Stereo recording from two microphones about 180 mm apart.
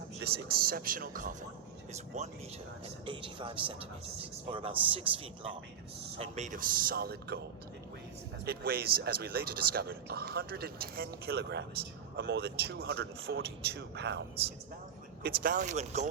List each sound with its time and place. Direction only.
0.2 s speech: 60° right (ahead or behind)
1.9 s speech: 40° right (ahead or behind)
3.1 s speech: 30° right (ahead or behind); by 7.3 s 60° right (ahead or behind)
8.4 s speech: 60° right (ahead or behind)
15.2 s speech: 45° right (ahead or behind)